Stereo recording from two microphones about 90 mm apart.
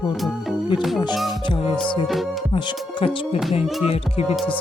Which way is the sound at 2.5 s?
65° left (ahead or behind).